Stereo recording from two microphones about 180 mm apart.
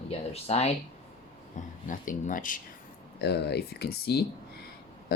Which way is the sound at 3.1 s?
65° left (ahead or behind).